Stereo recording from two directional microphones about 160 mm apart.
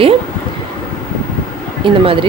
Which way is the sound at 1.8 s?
30° right (ahead or behind).